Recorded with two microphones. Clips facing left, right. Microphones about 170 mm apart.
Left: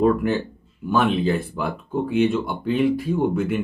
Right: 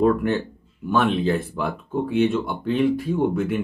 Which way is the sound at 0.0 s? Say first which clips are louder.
Even; centre (ahead or behind).